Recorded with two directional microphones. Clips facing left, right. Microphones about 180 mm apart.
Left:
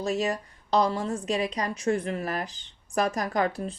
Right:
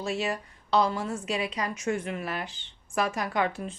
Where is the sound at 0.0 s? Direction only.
40° left (ahead or behind).